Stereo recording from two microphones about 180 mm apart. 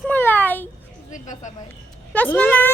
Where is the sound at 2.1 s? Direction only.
10° left (ahead or behind).